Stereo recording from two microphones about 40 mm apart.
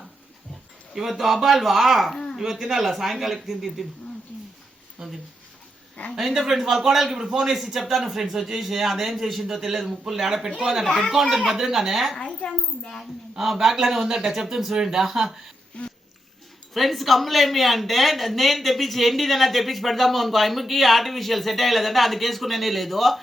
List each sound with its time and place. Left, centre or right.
0.9 s speech: centre
2.1 s a sound: centre
2.4 s speech: centre
5.0 s speech: centre
12.5 s speech: centre
13.3 s speech: centre
15.8 s a sound: left
16.7 s speech: centre